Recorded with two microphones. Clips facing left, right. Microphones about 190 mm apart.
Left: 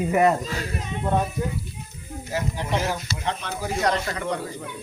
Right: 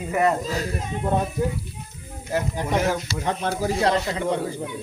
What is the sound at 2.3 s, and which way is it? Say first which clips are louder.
Speech: right 3 dB; 55° right (ahead or behind).